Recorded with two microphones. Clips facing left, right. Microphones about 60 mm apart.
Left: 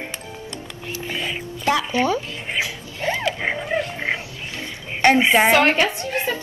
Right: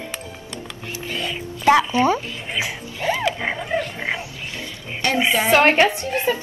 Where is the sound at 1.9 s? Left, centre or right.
Right.